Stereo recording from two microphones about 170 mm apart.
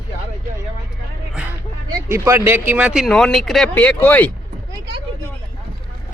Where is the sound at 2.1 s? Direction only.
15° right (ahead or behind); by 4.3 s 10° left (ahead or behind).